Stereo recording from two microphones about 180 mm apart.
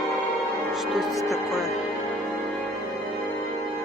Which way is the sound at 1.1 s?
20° left (ahead or behind).